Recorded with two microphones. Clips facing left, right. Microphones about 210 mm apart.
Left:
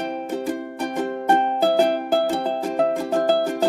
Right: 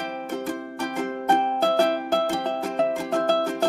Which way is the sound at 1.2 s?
5° left (ahead or behind).